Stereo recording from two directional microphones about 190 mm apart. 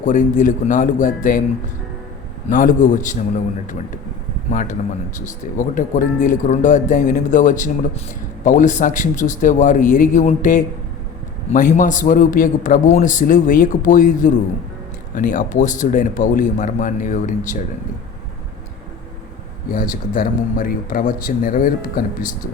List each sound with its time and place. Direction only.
0.0 s a man's voice: 40° left (ahead or behind)
2.5 s a man's voice: 45° left (ahead or behind)
19.6 s a man's voice: 45° left (ahead or behind)